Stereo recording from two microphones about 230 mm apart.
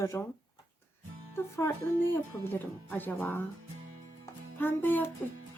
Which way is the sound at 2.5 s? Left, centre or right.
Centre.